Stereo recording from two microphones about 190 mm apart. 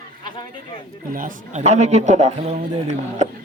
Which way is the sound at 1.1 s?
40° right (ahead or behind).